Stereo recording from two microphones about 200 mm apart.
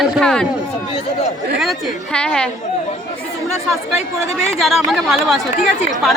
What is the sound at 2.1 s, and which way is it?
Speech, 5° left (ahead or behind).